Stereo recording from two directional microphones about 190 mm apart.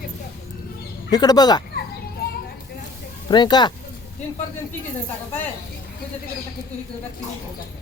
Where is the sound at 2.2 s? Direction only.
50° left (ahead or behind).